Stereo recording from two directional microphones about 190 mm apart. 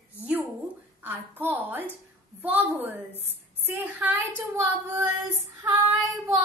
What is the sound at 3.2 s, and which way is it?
Speech, 10° right (ahead or behind).